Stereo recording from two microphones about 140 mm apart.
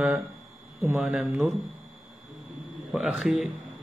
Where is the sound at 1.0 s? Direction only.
5° right (ahead or behind).